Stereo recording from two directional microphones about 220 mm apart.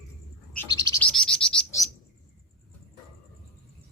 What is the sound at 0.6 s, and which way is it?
Bird, 15° left (ahead or behind).